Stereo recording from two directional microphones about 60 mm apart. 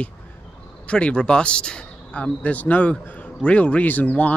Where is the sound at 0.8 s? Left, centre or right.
Centre.